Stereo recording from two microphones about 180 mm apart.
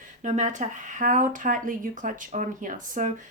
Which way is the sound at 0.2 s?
40° right (ahead or behind).